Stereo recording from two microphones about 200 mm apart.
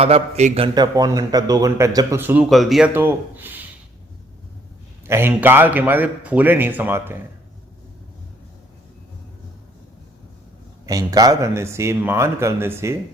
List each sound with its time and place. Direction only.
0.0 s a man's voice: 35° right (ahead or behind); by 3.7 s 10° right (ahead or behind)
5.0 s a man's voice: 10° right (ahead or behind)
10.8 s a man's voice: 15° right (ahead or behind)